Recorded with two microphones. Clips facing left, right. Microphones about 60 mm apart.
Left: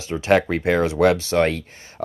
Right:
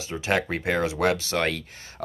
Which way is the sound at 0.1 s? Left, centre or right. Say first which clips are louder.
Left 7 dB; centre.